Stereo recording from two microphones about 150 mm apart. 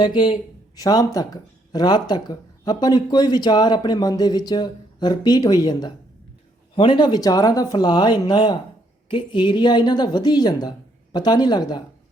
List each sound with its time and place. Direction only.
0.0 s a man's voice: 30° left (ahead or behind)